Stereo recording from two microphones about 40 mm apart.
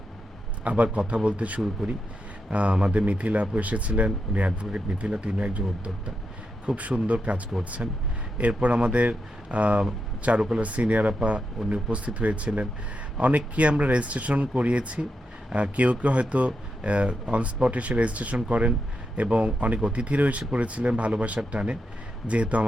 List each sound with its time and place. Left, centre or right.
0.6 s speech: right